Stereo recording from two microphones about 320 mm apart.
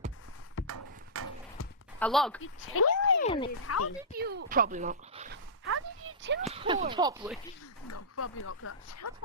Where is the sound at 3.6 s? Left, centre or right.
Left.